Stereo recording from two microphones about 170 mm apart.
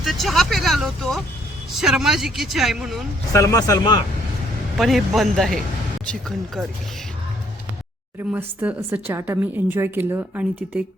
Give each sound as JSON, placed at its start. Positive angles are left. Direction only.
{"t": 0.0, "sound": "a woman's voice", "side_deg": 0}
{"t": 3.3, "sound": "a man's voice", "side_deg": 20}
{"t": 4.8, "sound": "a woman's voice", "side_deg": 0}
{"t": 8.3, "sound": "a woman's voice", "side_deg": -10}